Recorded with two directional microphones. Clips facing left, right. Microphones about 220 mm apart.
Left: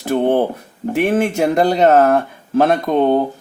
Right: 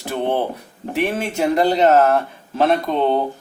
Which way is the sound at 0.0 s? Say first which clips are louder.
Left 6 dB; 50° left (ahead or behind).